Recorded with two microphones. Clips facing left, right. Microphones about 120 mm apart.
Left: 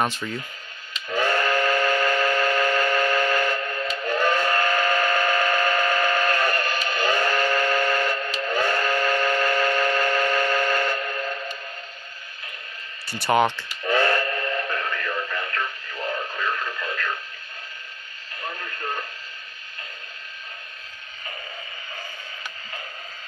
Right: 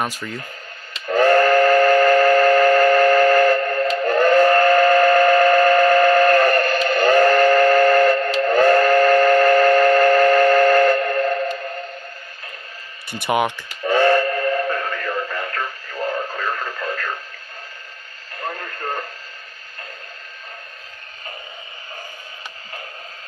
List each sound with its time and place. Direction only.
0.0 s speech: 5° right (ahead or behind)
1.0 s steam whistle: 45° right (ahead or behind)
13.1 s speech: 15° right (ahead or behind)
13.8 s train whistle: 30° right (ahead or behind)
15.3 s radio: 30° right (ahead or behind)
18.4 s radio: 40° right (ahead or behind)